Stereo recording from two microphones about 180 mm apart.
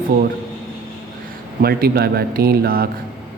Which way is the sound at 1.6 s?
60° right (ahead or behind).